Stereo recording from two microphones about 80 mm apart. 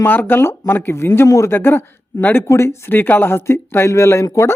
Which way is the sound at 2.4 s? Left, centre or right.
Left.